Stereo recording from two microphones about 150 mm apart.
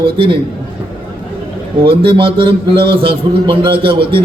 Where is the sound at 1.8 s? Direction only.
35° right (ahead or behind).